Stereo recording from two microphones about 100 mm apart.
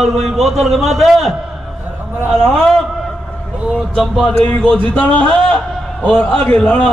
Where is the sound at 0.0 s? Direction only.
Centre (ahead or behind).